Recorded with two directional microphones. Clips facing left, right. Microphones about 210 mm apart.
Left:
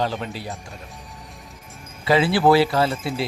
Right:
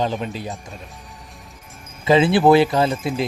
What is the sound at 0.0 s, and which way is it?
Speech, 20° right (ahead or behind).